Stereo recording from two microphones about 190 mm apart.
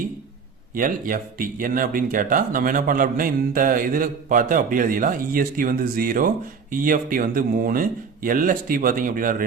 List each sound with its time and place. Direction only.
0.7 s speech: 45° right (ahead or behind)